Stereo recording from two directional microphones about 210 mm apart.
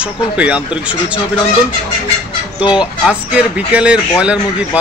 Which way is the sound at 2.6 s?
20° left (ahead or behind).